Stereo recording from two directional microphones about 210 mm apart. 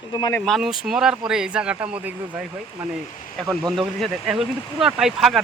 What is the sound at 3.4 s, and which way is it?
Speech, 5° left (ahead or behind).